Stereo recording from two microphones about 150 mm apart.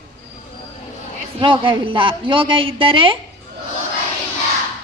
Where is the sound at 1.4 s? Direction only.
35° right (ahead or behind).